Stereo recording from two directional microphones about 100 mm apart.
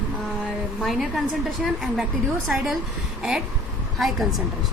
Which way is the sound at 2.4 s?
Centre (ahead or behind).